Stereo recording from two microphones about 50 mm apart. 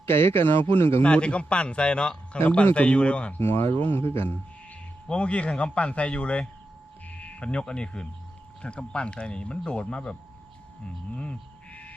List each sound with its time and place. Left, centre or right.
0.0 s a man's voice: left
1.0 s a man's voice: left
3.3 s a man's voice: left
5.0 s a man's voice: left
10.8 s frog: left